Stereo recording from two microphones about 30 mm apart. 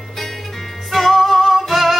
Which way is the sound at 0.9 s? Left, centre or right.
Centre.